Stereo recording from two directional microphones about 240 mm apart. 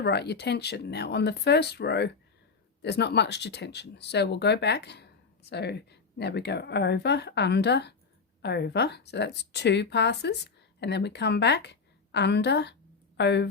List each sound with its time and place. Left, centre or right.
0.0 s speech: left